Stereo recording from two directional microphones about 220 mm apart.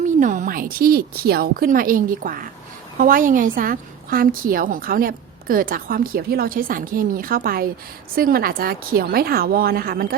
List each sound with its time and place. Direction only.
0.0 s a woman's voice: 35° right (ahead or behind)